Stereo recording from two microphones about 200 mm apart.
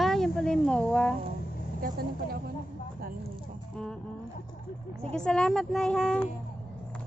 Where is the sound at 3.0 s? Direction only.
45° right (ahead or behind).